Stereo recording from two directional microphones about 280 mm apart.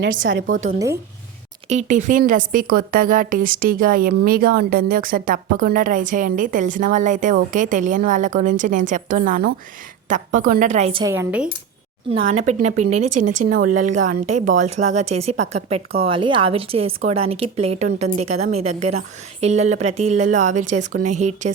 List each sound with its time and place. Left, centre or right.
0.0 s a woman's voice: right; by 11.4 s centre
12.1 s a woman's voice: right
13.1 s speech: right
13.7 s a woman's voice: right
16.0 s a woman's voice: centre